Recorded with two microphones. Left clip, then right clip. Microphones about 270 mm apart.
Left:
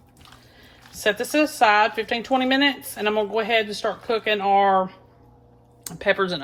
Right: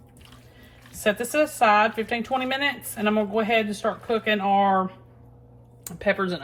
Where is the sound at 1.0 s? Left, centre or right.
Left.